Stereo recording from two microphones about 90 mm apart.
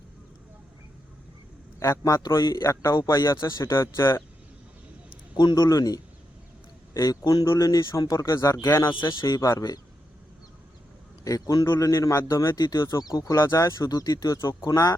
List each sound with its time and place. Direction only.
1.8 s a man's voice: 35° left (ahead or behind)
2.4 s a man's voice: 50° left (ahead or behind); by 4.2 s 30° left (ahead or behind)
5.3 s a man's voice: 50° left (ahead or behind)
7.4 s a man's voice: 30° left (ahead or behind)
9.0 s a man's voice: 50° left (ahead or behind)
11.2 s a man's voice: 40° left (ahead or behind)